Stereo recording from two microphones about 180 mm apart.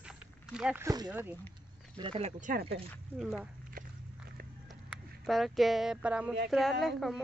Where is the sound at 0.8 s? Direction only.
20° right (ahead or behind).